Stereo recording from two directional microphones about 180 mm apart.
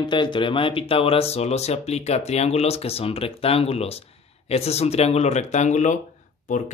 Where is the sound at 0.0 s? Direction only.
25° left (ahead or behind).